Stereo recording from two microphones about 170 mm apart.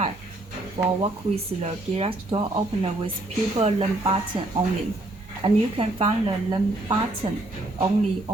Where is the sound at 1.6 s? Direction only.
35° right (ahead or behind).